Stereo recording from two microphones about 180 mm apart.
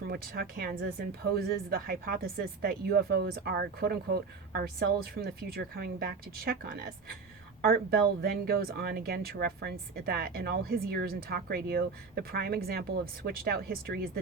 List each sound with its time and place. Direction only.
0.1 s speech: 55° right (ahead or behind)